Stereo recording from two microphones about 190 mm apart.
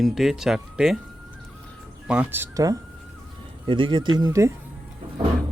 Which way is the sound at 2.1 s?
10° right (ahead or behind).